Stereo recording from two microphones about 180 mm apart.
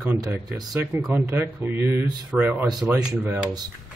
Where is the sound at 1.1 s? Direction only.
15° right (ahead or behind).